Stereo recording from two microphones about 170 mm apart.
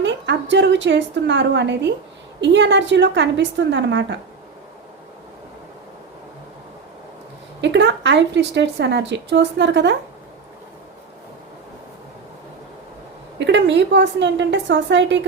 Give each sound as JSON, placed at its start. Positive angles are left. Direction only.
{"t": 0.0, "sound": "a woman's voice", "side_deg": -90}
{"t": 7.6, "sound": "a woman's voice", "side_deg": -90}
{"t": 13.4, "sound": "a woman's voice", "side_deg": -90}